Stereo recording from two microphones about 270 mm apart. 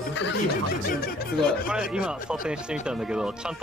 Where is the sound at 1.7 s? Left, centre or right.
Centre.